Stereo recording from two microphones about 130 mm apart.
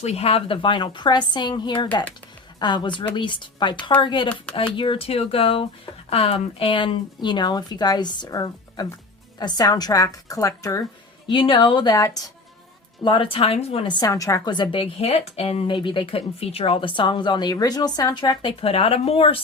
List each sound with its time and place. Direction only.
0.0 s speech: 55° left (ahead or behind); by 4.3 s 35° left (ahead or behind)
4.5 s speech: 10° left (ahead or behind)
4.8 s a woman's voice: 45° left (ahead or behind); by 10.8 s 25° left (ahead or behind)
11.3 s speech: 40° left (ahead or behind)
13.0 s a woman's voice: 40° left (ahead or behind)
13.8 s speech: 30° left (ahead or behind)
15.0 s speech: 55° left (ahead or behind)